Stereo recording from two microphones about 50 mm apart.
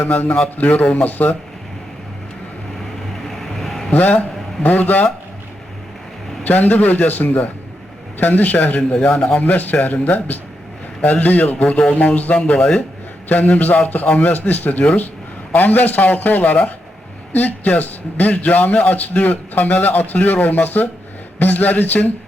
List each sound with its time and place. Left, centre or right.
0.0 s a man's voice: left
3.2 s vehicle: centre
3.9 s a man's voice: left
6.4 s a man's voice: left
13.2 s a man's voice: left